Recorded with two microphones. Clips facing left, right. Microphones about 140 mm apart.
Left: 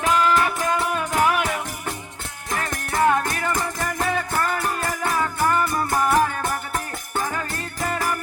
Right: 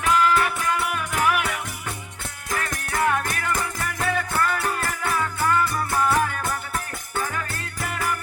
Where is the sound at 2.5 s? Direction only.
30° left (ahead or behind).